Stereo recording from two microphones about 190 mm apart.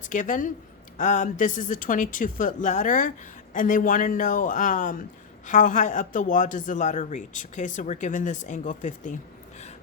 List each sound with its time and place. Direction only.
0.0 s speech: 45° left (ahead or behind)